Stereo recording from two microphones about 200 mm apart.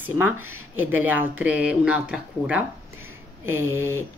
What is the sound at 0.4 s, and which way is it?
Speech, 90° right.